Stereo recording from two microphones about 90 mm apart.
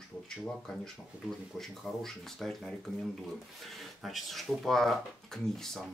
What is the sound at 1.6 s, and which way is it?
Speech, 5° left (ahead or behind).